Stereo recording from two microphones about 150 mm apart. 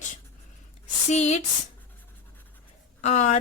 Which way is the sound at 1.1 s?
50° left (ahead or behind).